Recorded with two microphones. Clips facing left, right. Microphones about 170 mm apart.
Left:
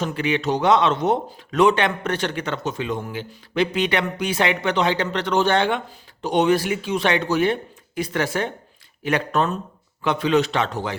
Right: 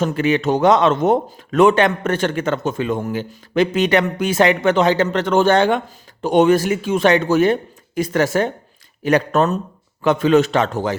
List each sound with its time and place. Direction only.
0.0 s a man's voice: 45° right (ahead or behind)